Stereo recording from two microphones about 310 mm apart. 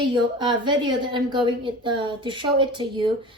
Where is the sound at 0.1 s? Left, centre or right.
Centre.